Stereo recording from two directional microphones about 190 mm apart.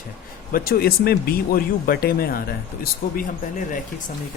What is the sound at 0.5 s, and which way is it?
Speech, 50° left (ahead or behind).